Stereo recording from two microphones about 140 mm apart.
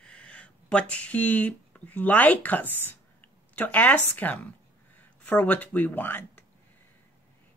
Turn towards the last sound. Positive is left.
turn(degrees=10)  # may be behind; listen again after turning